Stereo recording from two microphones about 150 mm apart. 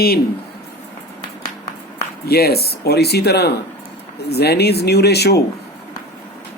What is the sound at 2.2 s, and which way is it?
Speech, 90° left.